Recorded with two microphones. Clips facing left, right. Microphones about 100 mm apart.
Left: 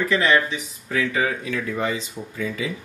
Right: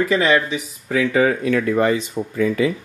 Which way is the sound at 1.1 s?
50° right (ahead or behind).